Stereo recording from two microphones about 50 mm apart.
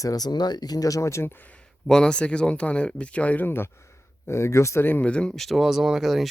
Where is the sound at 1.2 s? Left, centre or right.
Left.